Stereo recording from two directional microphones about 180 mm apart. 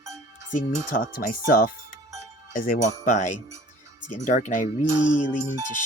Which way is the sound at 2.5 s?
50° left (ahead or behind).